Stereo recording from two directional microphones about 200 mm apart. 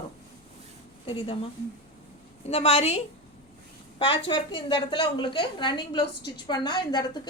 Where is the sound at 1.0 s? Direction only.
25° left (ahead or behind).